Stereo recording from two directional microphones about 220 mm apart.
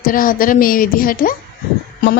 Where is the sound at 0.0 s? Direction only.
40° left (ahead or behind).